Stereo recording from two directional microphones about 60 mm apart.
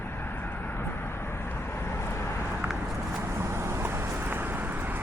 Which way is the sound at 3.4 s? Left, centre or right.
Right.